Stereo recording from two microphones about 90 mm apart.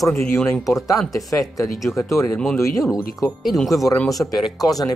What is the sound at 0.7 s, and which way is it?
Speech, 40° left (ahead or behind).